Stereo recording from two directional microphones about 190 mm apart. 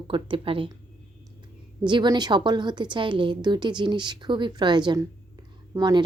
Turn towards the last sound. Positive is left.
turn(degrees=-20)  # may be behind; listen again after turning